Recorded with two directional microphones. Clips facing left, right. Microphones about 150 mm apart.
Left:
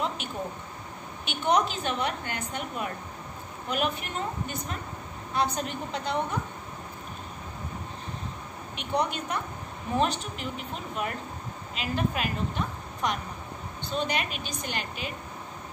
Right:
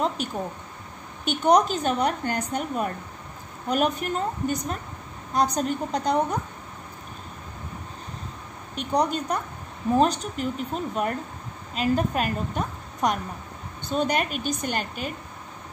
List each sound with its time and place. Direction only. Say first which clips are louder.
0.2 s a woman's voice: right 4 dB; 40° right (ahead or behind)
8.7 s a woman's voice: right 5 dB; 40° right (ahead or behind)